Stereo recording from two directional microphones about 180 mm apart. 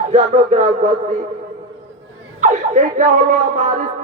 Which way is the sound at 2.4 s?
40° right (ahead or behind).